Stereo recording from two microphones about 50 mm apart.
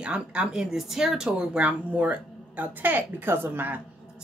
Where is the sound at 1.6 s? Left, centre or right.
Right.